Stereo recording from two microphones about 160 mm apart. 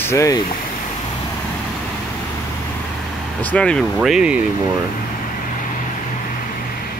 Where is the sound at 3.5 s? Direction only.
5° left (ahead or behind).